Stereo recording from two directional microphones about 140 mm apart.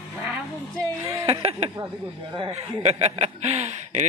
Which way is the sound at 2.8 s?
45° right (ahead or behind).